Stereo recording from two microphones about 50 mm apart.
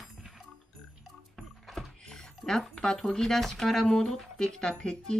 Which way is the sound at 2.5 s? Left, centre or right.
Centre.